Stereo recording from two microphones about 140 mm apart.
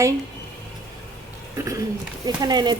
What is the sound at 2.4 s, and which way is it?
Speech, 30° right (ahead or behind).